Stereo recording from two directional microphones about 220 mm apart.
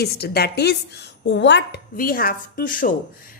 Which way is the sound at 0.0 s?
45° left (ahead or behind).